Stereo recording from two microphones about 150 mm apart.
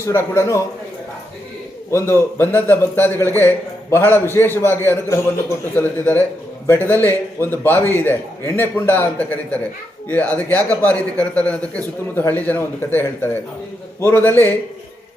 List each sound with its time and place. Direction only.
0.0 s a man's voice: 15° left (ahead or behind)
1.9 s a man's voice: 15° left (ahead or behind)